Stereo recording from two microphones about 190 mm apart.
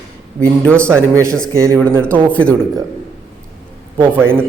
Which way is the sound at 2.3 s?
5° left (ahead or behind).